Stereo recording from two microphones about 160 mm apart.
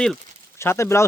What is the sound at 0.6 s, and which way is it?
Speech, 15° left (ahead or behind).